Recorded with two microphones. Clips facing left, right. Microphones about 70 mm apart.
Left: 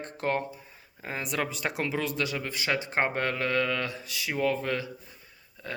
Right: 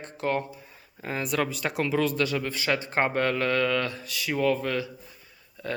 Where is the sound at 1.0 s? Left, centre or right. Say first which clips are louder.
Right 4 dB; left.